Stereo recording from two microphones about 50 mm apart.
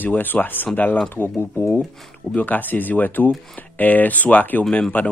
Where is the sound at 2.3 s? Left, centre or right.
Left.